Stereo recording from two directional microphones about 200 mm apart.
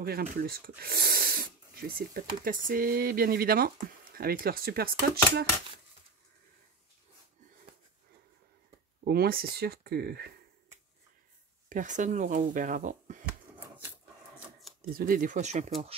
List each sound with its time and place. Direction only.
0.0 s speech: 50° right (ahead or behind)
9.0 s speech: 50° right (ahead or behind)
11.7 s speech: 40° right (ahead or behind)
14.8 s speech: 45° right (ahead or behind)